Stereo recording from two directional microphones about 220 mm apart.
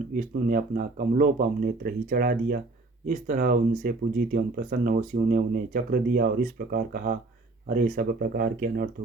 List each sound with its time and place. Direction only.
0.1 s speech: 40° right (ahead or behind)